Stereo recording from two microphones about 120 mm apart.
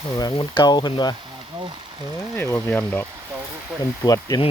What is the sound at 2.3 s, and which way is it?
Speech, 25° left (ahead or behind).